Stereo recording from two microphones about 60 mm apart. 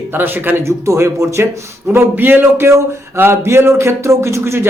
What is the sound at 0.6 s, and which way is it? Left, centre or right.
Speech, right.